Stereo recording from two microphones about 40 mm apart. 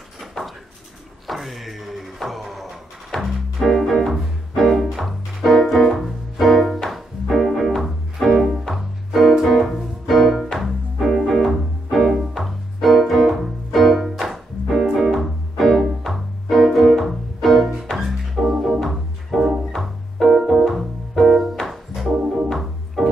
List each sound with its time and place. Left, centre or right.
0.4 s a sound: centre
1.2 s music: centre
22.5 s organ: centre